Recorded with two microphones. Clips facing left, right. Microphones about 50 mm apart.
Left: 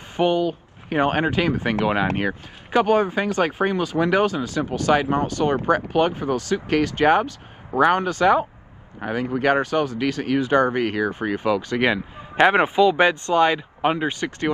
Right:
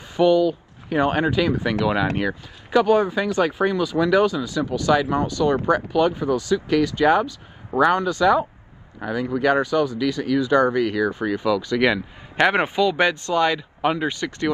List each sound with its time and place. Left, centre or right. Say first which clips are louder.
0.1 s speech: right 3 dB; left
11.8 s a man's voice: right 1 dB; centre